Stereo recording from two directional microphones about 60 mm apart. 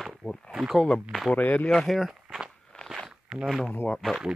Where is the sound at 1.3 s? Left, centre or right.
Left.